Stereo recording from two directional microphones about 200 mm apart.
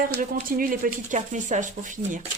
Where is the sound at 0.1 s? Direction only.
40° right (ahead or behind).